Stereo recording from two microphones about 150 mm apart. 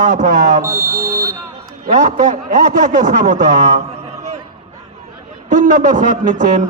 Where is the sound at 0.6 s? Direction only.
20° right (ahead or behind).